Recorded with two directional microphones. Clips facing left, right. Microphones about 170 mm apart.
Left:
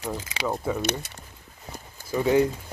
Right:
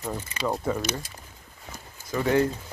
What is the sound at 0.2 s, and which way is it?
Speech, 90° left.